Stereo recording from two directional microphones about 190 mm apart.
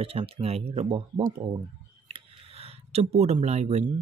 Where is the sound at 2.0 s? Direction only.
30° right (ahead or behind).